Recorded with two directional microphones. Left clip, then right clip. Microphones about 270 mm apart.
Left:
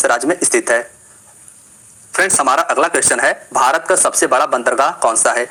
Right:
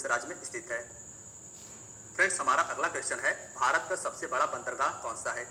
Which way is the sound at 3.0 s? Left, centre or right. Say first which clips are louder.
Left 17 dB; left.